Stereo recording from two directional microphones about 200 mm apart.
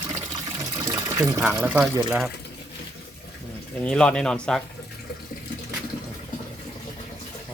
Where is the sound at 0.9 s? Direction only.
15° right (ahead or behind).